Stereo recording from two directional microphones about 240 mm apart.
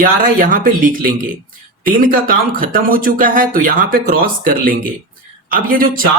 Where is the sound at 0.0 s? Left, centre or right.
Right.